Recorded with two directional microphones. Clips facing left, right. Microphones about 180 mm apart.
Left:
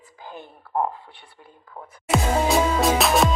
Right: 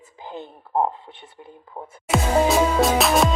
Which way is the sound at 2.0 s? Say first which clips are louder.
Right 2 dB; centre (ahead or behind).